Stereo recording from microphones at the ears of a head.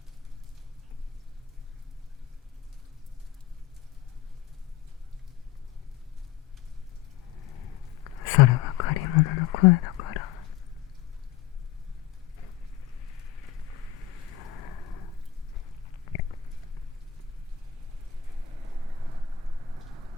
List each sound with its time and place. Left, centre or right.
7.3 s whispering: left
13.0 s a sound: left
18.3 s vehicle: right